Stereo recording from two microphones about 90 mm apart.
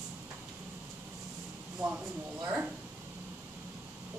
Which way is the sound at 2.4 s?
20° right (ahead or behind).